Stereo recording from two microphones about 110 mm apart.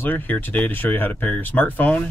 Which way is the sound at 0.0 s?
20° left (ahead or behind).